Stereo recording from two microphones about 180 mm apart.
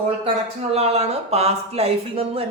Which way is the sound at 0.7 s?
35° right (ahead or behind).